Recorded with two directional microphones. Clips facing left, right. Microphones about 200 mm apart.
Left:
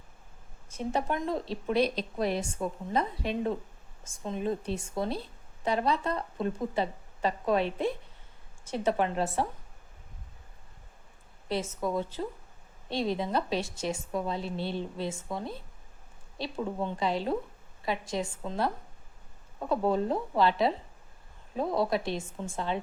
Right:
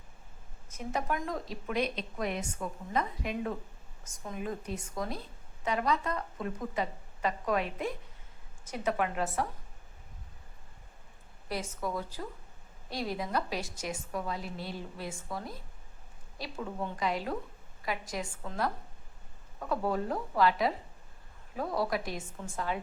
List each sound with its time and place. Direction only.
0.7 s a woman's voice: 30° left (ahead or behind)
11.4 s a woman's voice: 25° left (ahead or behind)